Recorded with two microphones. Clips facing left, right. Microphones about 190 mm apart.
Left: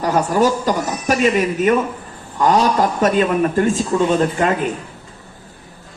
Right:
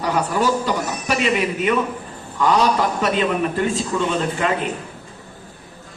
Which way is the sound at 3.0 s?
45° left (ahead or behind).